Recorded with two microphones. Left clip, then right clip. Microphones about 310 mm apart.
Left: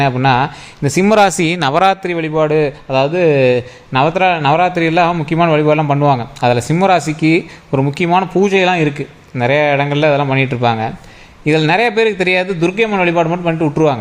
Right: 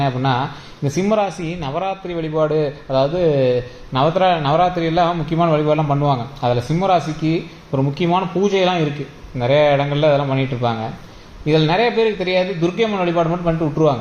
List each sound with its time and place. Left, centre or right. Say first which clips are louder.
0.0 s a man's voice: left 7 dB; left